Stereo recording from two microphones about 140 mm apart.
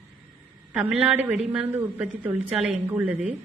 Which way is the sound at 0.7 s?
5° right (ahead or behind).